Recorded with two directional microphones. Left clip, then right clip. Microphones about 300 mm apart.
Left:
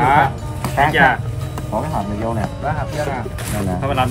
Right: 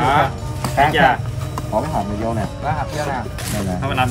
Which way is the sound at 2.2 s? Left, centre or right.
Centre.